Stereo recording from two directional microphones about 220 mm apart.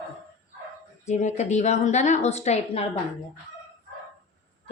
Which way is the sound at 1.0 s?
30° left (ahead or behind).